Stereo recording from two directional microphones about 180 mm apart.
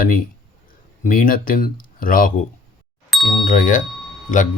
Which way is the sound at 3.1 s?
Centre (ahead or behind).